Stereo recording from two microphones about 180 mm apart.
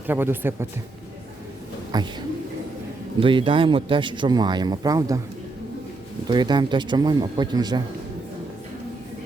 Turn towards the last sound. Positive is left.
turn(degrees=-25)  # may be behind; listen again after turning